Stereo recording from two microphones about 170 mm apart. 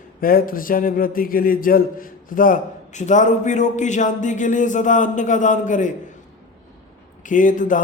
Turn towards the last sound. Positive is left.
turn(degrees=50)  # may be behind; listen again after turning